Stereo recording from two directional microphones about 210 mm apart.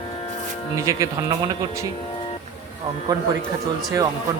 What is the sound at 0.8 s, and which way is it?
Speech, 15° right (ahead or behind).